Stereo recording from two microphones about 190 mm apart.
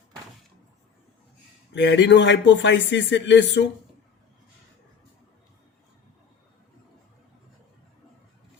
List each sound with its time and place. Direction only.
1.7 s speech: 70° left (ahead or behind)